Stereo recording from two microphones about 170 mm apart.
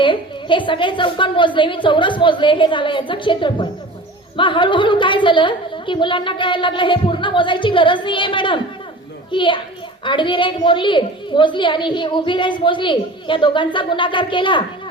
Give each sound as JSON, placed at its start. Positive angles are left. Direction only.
{"t": 0.0, "sound": "a woman's voice", "side_deg": 30}